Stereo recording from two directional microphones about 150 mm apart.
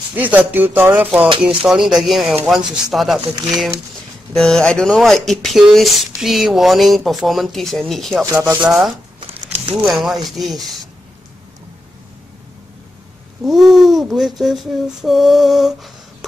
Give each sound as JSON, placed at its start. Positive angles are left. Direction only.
{"t": 0.2, "sound": "a sound", "side_deg": -10}
{"t": 1.6, "sound": "speech", "side_deg": 0}
{"t": 4.3, "sound": "speech", "side_deg": 5}
{"t": 8.3, "sound": "speech", "side_deg": -20}
{"t": 8.5, "sound": "speech", "side_deg": -5}
{"t": 9.2, "sound": "crumpling", "side_deg": -40}
{"t": 9.8, "sound": "speech", "side_deg": 0}
{"t": 13.4, "sound": "speech", "side_deg": 0}